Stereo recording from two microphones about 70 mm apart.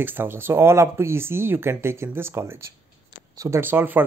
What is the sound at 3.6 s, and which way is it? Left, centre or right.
Speech, right.